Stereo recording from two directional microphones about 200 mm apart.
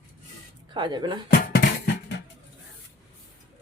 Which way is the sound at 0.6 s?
20° right (ahead or behind).